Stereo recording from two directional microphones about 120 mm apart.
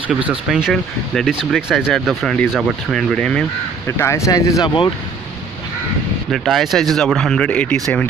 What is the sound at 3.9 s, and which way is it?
Speech, 25° left (ahead or behind).